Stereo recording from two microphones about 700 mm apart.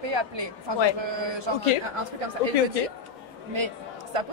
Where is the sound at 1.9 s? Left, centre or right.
Right.